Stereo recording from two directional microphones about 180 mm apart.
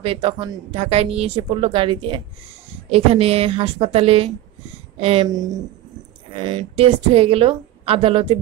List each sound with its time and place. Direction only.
0.0 s a woman's voice: 30° right (ahead or behind)
5.3 s a woman's voice: 20° right (ahead or behind)